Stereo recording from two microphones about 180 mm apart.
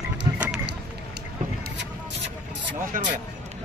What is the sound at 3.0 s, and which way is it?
Music, 50° right (ahead or behind).